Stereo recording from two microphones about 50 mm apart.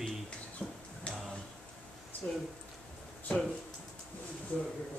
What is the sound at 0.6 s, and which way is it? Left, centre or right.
Music, left.